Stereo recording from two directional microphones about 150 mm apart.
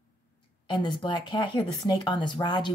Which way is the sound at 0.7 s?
30° left (ahead or behind).